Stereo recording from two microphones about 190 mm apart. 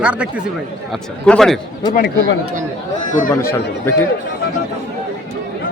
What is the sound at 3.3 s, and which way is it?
Speech, 15° left (ahead or behind).